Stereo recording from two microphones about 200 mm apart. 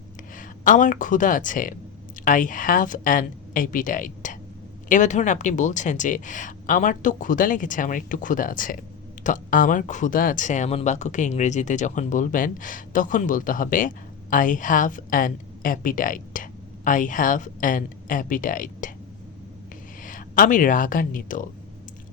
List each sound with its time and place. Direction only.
0.3 s speech: 40° left (ahead or behind)
20.0 s speech: 40° left (ahead or behind)